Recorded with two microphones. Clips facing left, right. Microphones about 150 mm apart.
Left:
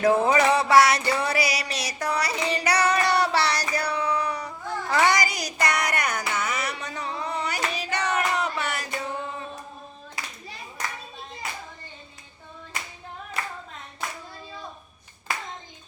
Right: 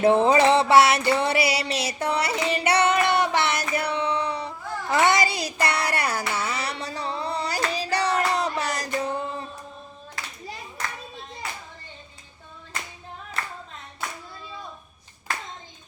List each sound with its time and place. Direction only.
0.0 s music: 25° right (ahead or behind)